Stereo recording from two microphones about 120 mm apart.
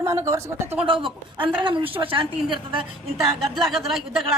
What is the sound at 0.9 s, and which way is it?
A woman's voice, 45° right (ahead or behind).